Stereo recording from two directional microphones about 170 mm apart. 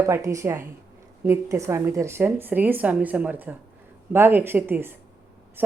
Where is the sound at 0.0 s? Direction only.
20° right (ahead or behind).